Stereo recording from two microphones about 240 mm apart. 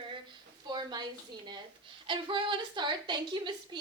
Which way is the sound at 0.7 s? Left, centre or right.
Centre.